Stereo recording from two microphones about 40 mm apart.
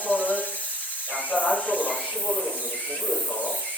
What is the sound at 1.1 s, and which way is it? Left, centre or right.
Snake, left.